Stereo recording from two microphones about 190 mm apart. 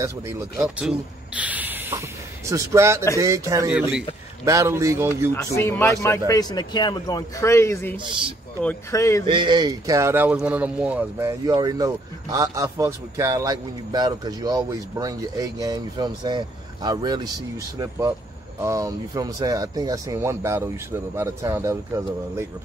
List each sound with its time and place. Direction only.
0.0 s speech: 15° right (ahead or behind)
5.3 s speech: 15° left (ahead or behind)
8.0 s speech: 25° right (ahead or behind)
8.6 s speech: 15° left (ahead or behind)
9.2 s speech: 25° right (ahead or behind)